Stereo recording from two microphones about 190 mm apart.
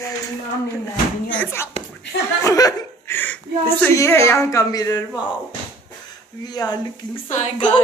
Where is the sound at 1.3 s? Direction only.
10° left (ahead or behind).